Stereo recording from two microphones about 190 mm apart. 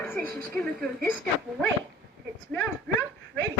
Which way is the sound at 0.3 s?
10° left (ahead or behind).